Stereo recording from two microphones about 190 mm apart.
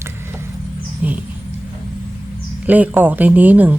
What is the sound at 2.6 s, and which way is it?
Speech, 10° right (ahead or behind).